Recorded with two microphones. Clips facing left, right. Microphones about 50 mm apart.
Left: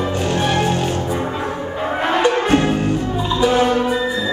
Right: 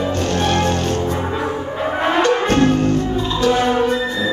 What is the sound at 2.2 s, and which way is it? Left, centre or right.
Music, centre.